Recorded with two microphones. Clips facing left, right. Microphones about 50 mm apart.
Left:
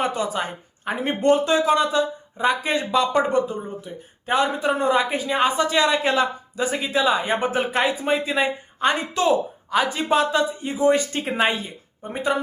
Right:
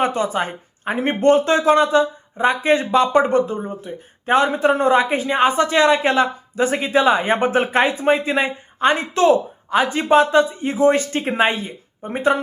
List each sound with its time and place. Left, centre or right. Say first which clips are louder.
0.0 s speech: right 4 dB; right
11.1 s speech: right 4 dB; right
12.0 s speech: right 5 dB; right